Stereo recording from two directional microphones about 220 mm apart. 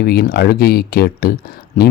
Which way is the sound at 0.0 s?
45° left (ahead or behind).